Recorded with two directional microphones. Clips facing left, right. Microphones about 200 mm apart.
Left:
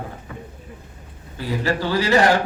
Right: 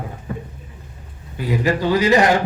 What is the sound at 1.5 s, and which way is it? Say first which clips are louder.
Speech: right 4 dB; 15° right (ahead or behind).